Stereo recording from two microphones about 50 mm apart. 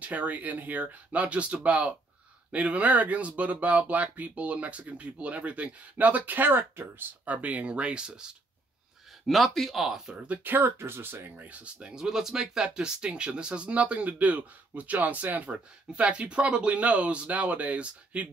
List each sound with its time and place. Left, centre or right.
0.0 s speech: right
7.4 s speech: right
9.2 s speech: centre
10.1 s speech: right
11.5 s speech: right
11.9 s speech: centre